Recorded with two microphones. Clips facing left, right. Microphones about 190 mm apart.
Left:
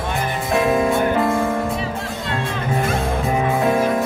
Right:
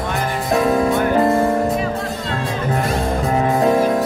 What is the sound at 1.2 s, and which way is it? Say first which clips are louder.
Music: right 4 dB; 40° right (ahead or behind).